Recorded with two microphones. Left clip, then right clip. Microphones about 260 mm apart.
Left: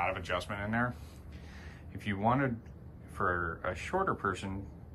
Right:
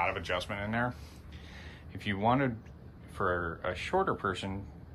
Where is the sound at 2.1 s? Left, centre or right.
Centre.